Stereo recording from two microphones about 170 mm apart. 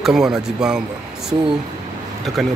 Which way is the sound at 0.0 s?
5° right (ahead or behind).